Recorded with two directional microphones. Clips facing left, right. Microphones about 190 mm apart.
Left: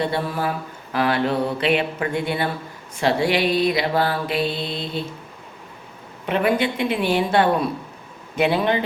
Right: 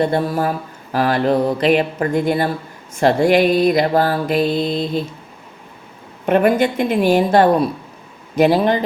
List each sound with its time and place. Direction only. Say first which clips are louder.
0.0 s mantra: right 6 dB; 45° right (ahead or behind)
0.9 s speech: right 4 dB; 40° right (ahead or behind)
2.9 s mantra: right 6 dB; 45° right (ahead or behind)
6.2 s mantra: right 6 dB; 45° right (ahead or behind)
8.4 s speech: right 5 dB; 40° right (ahead or behind)